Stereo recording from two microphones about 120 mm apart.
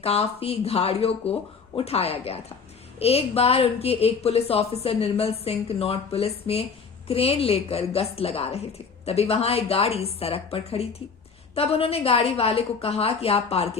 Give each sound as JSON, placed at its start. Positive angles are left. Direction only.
{"t": 0.0, "sound": "a woman's voice", "side_deg": 55}